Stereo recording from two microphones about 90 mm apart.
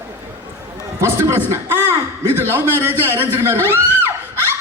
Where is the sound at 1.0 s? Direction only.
30° right (ahead or behind).